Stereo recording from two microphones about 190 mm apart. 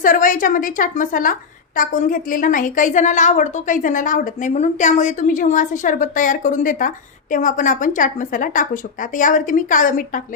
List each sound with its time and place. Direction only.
0.0 s a woman's voice: 45° left (ahead or behind)